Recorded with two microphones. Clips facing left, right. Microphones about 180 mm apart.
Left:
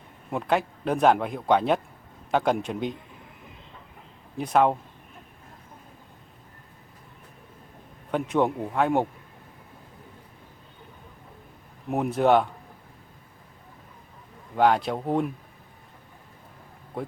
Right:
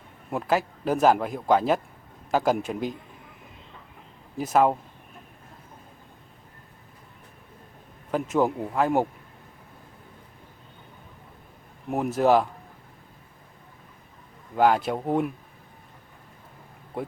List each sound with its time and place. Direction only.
0.3 s speech: centre (ahead or behind)
4.4 s speech: 5° right (ahead or behind)
8.1 s speech: centre (ahead or behind)
11.9 s speech: centre (ahead or behind)
14.5 s speech: 5° right (ahead or behind)